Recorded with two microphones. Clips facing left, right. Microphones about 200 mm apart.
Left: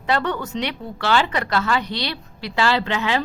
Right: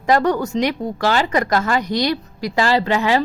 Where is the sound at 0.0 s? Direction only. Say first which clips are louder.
Right 6 dB; 45° right (ahead or behind).